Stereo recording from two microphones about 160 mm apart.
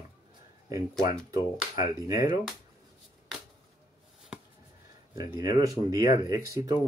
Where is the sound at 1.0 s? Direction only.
60° left (ahead or behind).